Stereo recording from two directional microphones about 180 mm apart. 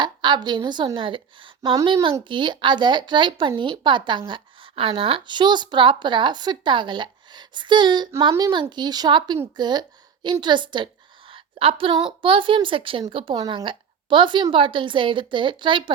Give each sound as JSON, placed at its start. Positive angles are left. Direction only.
{"t": 0.0, "sound": "a woman's voice", "side_deg": -25}